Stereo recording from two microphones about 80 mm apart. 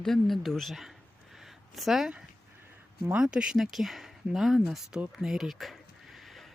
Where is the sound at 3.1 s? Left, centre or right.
Centre.